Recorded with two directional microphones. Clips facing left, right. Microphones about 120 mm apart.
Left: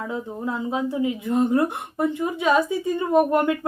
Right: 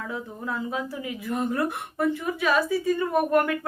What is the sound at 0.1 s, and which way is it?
Speech, 25° left (ahead or behind).